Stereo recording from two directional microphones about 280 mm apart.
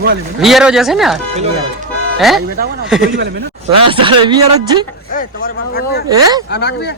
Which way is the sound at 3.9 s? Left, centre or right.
Centre.